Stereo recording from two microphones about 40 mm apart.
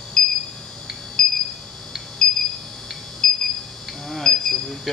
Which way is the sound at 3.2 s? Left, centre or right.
Centre.